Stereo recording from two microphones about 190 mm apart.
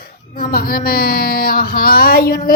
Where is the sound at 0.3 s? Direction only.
50° left (ahead or behind).